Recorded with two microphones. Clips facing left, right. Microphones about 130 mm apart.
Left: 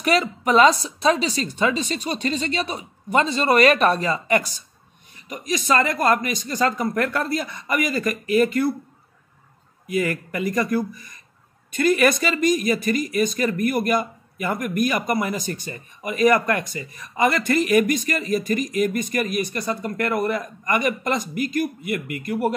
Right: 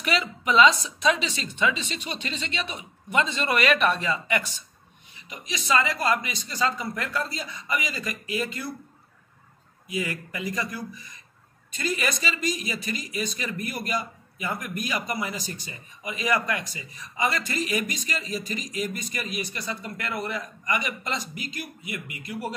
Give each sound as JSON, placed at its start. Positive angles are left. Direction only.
{"t": 0.0, "sound": "speech", "side_deg": 45}
{"t": 9.8, "sound": "speech", "side_deg": 55}
{"t": 11.7, "sound": "speech", "side_deg": 60}